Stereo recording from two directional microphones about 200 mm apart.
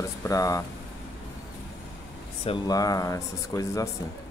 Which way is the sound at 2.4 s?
20° left (ahead or behind).